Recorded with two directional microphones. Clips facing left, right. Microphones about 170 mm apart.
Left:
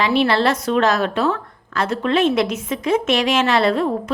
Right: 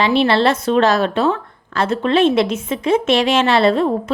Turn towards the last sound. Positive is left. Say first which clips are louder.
# right 3 dB
turn(degrees=-25)  # may be behind; listen again after turning